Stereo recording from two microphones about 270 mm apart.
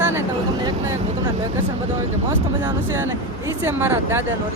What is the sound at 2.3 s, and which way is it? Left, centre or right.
Speech, centre.